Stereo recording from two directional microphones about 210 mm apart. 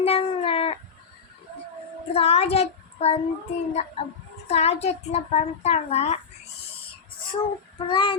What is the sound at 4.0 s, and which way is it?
Cat, 30° left (ahead or behind).